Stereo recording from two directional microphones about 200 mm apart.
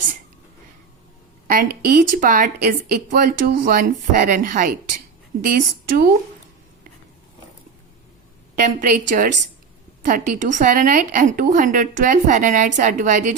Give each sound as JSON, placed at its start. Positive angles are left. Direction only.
{"t": 1.5, "sound": "a woman's voice", "side_deg": -45}
{"t": 8.5, "sound": "a woman's voice", "side_deg": -40}